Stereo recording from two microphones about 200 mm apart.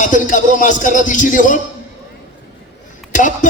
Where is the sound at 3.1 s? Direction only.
40° left (ahead or behind).